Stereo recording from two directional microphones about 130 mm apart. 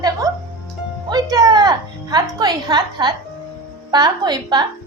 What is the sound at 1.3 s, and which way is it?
A woman's voice, 30° right (ahead or behind).